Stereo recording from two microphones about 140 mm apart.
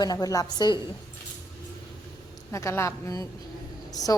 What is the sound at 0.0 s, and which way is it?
Speech, 30° left (ahead or behind).